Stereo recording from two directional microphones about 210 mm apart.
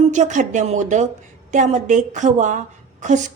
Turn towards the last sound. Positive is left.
turn(degrees=-35)  # may be behind; listen again after turning